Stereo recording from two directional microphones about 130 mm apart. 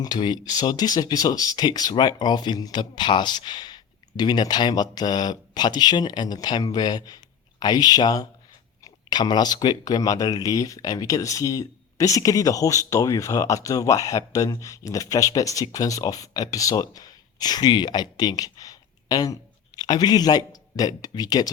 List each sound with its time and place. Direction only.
0.0 s speech: 35° left (ahead or behind)